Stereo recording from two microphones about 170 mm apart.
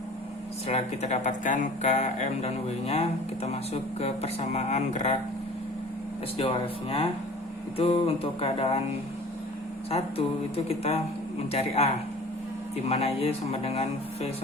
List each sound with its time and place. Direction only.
0.7 s speech: 40° left (ahead or behind)
6.3 s speech: 30° left (ahead or behind)
9.9 s speech: 35° left (ahead or behind)